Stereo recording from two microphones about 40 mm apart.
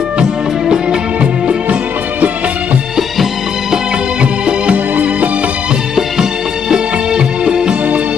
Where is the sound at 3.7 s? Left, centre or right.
Right.